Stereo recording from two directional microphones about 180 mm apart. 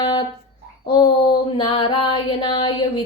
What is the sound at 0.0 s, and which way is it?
Speech, 25° left (ahead or behind).